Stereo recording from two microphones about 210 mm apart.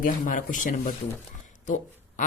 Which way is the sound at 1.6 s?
35° left (ahead or behind).